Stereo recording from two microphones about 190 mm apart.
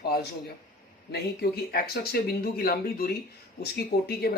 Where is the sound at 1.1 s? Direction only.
55° left (ahead or behind).